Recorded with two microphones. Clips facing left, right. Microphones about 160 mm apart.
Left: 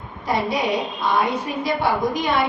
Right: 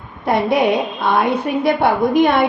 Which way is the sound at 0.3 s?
55° right (ahead or behind).